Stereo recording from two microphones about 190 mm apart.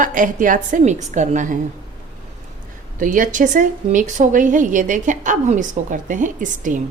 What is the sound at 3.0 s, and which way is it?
A woman's voice, 45° right (ahead or behind).